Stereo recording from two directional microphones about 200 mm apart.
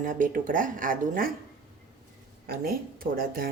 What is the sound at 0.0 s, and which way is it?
Speech, 40° right (ahead or behind).